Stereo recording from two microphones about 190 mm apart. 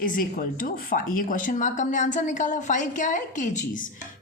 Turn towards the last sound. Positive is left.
turn(degrees=45)  # may be behind; listen again after turning